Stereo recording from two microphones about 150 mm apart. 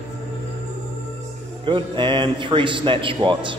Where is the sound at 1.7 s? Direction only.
35° right (ahead or behind).